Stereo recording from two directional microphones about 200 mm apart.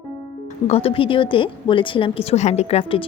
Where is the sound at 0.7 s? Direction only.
30° left (ahead or behind).